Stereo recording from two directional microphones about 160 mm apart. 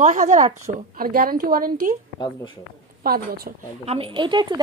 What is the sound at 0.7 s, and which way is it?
A woman's voice, 65° right (ahead or behind).